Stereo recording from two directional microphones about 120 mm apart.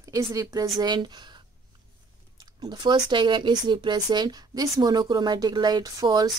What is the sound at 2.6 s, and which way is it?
Speech, 35° right (ahead or behind).